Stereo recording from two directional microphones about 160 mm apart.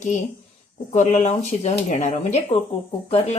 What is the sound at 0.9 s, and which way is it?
Speech, 45° left (ahead or behind).